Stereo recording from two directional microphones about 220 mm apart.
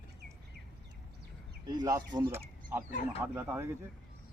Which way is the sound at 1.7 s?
15° right (ahead or behind).